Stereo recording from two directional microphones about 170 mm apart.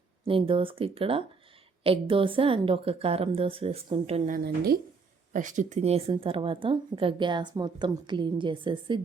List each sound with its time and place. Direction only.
0.3 s a woman's voice: 30° right (ahead or behind)
4.3 s a woman's voice: 65° right (ahead or behind)
5.3 s a woman's voice: 50° right (ahead or behind); by 9.0 s 30° right (ahead or behind)